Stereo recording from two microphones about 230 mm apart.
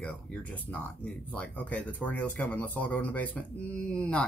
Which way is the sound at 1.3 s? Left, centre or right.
Centre.